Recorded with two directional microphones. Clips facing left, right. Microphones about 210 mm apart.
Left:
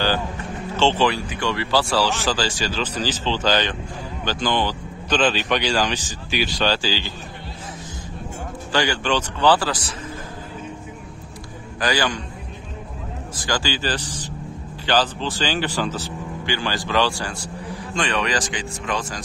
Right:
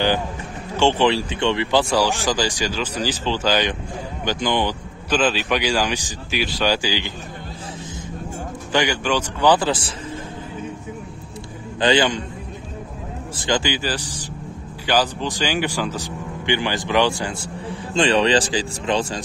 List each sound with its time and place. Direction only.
0.7 s speech: 15° right (ahead or behind)
5.2 s speech: 5° right (ahead or behind)
8.7 s speech: 15° right (ahead or behind)
11.8 s speech: 20° right (ahead or behind)
13.4 s speech: 20° right (ahead or behind)